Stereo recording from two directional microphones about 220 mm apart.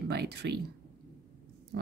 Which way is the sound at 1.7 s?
50° right (ahead or behind).